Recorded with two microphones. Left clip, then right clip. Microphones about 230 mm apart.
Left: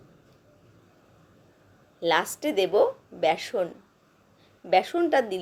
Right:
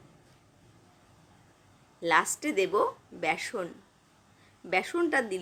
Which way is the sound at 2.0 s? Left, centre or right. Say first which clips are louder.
Left 1 dB; centre.